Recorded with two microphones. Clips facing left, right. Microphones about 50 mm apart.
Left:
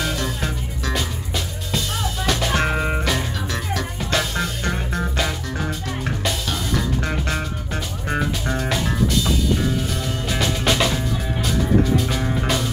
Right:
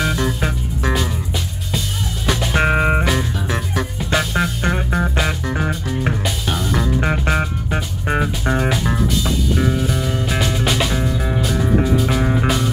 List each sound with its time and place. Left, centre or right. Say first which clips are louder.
0.0 s music: right 5 dB; centre
2.5 s music: right 5 dB; right
4.2 s music: right 4 dB; centre
12.4 s music: right 3 dB; centre